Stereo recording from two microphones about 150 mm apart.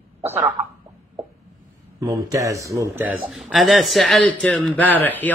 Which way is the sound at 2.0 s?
20° right (ahead or behind).